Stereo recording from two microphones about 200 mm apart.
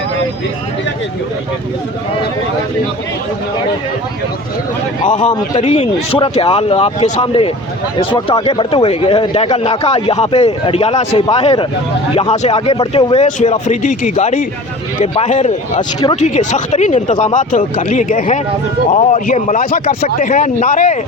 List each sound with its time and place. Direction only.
5.0 s speech: 35° left (ahead or behind)